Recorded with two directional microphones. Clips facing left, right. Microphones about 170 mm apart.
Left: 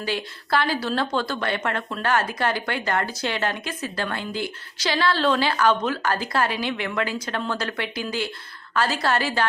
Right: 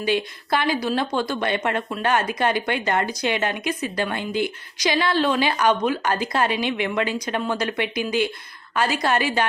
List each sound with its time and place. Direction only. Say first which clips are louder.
0.0 s speech: right 5 dB; 20° right (ahead or behind)